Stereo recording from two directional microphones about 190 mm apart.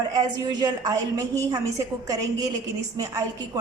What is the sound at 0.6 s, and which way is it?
A woman's voice, 20° right (ahead or behind).